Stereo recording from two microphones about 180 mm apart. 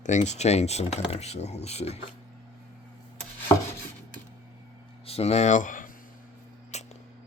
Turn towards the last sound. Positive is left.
turn(degrees=40)  # may be behind; listen again after turning